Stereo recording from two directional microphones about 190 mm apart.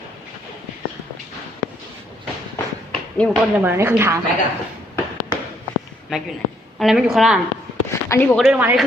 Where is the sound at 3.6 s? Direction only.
10° right (ahead or behind).